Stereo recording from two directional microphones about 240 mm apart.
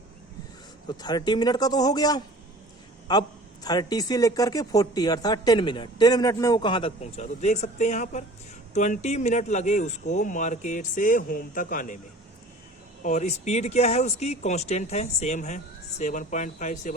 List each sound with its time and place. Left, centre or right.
0.9 s a woman's voice: centre; by 11.9 s left
13.0 s speech: left